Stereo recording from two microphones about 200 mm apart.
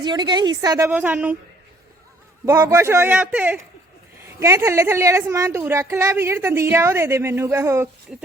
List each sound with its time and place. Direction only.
0.0 s a woman's voice: 20° right (ahead or behind)
2.5 s a woman's voice: 15° right (ahead or behind)